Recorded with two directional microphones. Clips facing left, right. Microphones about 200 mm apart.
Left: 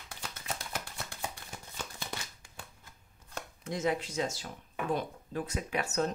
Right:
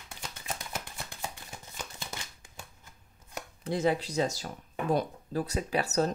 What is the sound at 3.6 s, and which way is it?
Speech, 35° right (ahead or behind).